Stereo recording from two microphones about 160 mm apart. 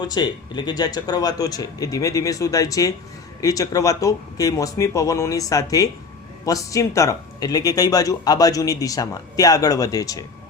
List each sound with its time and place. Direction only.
0.0 s speech: 25° left (ahead or behind)